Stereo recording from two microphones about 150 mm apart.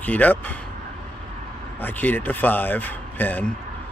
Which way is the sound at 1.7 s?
10° left (ahead or behind).